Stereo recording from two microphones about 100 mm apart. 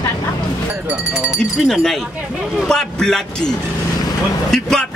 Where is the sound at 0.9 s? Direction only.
10° right (ahead or behind).